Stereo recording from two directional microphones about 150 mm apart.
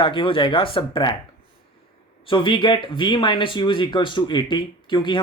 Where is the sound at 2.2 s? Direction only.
30° left (ahead or behind).